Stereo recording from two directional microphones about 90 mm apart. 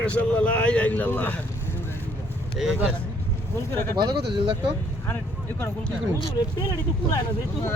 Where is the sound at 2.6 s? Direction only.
5° right (ahead or behind).